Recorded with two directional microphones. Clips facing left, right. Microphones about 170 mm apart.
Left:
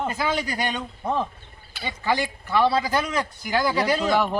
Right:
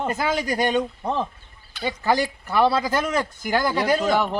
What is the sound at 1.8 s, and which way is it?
Speech, 45° right (ahead or behind).